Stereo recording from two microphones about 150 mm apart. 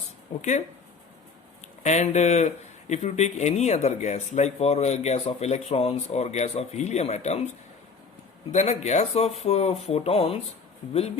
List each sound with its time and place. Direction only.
0.3 s speech: 45° left (ahead or behind)
1.8 s speech: 50° left (ahead or behind)
8.5 s speech: 45° left (ahead or behind)